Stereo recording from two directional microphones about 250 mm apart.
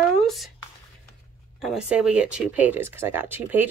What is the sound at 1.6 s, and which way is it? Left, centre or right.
Speech, centre.